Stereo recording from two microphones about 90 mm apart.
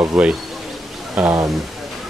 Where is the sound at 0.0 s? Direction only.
5° right (ahead or behind).